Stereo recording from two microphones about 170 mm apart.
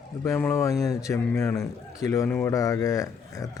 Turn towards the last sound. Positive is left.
turn(degrees=20)  # may be behind; listen again after turning